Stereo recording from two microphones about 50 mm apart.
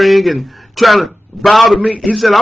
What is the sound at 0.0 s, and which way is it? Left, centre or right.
A man's voice, centre.